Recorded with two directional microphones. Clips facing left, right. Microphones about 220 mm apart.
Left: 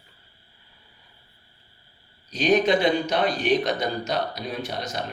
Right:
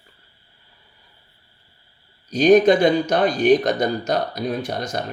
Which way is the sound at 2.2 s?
45° right (ahead or behind).